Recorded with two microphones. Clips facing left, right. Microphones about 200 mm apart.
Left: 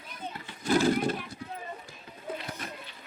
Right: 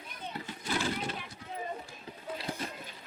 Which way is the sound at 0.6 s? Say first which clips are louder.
Left 10 dB; 45° left (ahead or behind).